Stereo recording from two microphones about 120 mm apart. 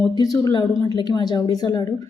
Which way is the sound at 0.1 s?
35° left (ahead or behind).